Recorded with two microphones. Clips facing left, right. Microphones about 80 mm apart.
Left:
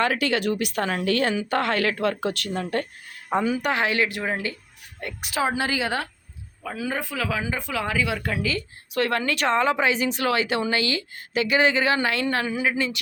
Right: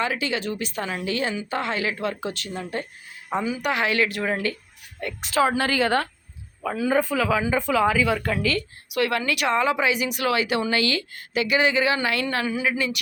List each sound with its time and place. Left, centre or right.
0.0 s a woman's voice: left
3.3 s speech: left
3.7 s a woman's voice: left; by 8.6 s centre
9.0 s speech: left